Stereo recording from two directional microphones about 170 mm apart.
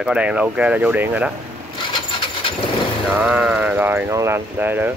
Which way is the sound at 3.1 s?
5° right (ahead or behind).